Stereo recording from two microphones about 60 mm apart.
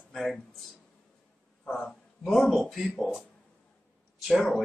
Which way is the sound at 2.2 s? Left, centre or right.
Centre.